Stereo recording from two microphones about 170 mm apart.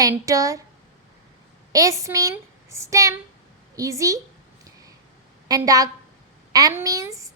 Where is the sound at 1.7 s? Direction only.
20° right (ahead or behind).